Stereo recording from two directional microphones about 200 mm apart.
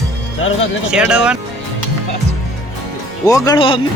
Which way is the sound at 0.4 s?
90° left.